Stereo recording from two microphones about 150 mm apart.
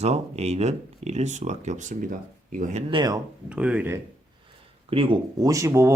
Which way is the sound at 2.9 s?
25° right (ahead or behind).